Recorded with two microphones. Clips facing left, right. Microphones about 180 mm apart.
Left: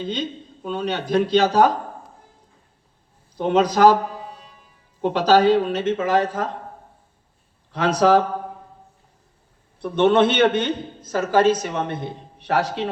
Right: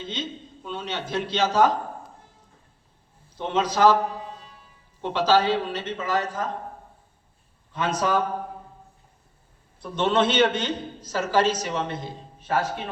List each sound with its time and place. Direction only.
0.0 s a man's voice: 40° left (ahead or behind)
3.3 s a man's voice: 40° left (ahead or behind)
4.9 s speech: 40° left (ahead or behind); by 6.5 s 60° left (ahead or behind)
7.7 s a man's voice: 75° left (ahead or behind)
9.8 s a woman's voice: 60° left (ahead or behind); by 12.9 s 75° left (ahead or behind)